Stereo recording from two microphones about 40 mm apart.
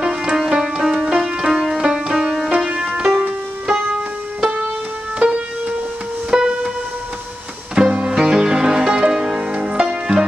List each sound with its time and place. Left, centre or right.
0.0 s music: right; by 2.5 s centre
2.5 s music: right
2.8 s music: centre
7.7 s music: right